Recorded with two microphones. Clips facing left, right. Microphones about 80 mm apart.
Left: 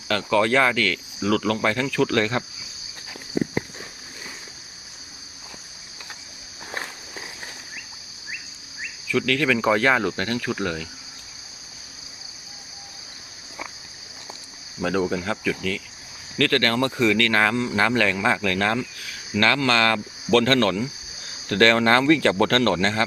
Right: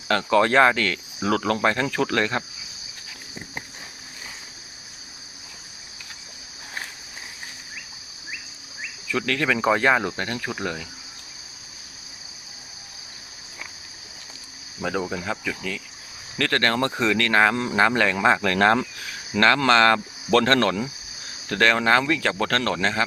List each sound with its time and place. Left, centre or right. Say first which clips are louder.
0.1 s speech: right 1 dB; right
9.0 s speech: left 2 dB; right; by 10.8 s centre
14.8 s speech: left 4 dB; centre
16.4 s speech: left 1 dB; right
17.5 s speech: right 1 dB; right
18.5 s speech: right 5 dB; right
18.9 s a sound: right 1 dB; right
19.6 s speech: right 3 dB; right
21.5 s speech: left 2 dB; centre